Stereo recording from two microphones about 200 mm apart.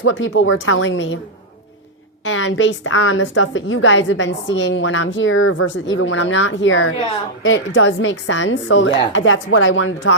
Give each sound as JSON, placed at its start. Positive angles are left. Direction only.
{"t": 0.0, "sound": "a woman's voice", "side_deg": 65}
{"t": 2.2, "sound": "a woman's voice", "side_deg": 75}